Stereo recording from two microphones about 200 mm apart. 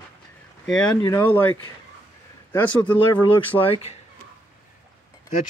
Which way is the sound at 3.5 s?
25° left (ahead or behind).